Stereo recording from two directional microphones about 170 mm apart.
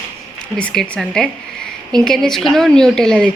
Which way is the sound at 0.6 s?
5° left (ahead or behind).